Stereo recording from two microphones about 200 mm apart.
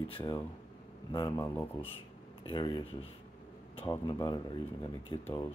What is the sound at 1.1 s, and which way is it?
Speech, 20° left (ahead or behind).